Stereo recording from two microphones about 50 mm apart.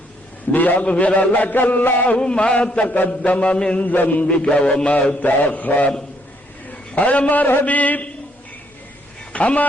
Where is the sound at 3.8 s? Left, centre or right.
Left.